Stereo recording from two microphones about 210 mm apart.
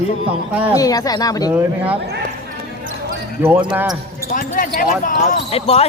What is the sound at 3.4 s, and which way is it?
Speech, 15° right (ahead or behind).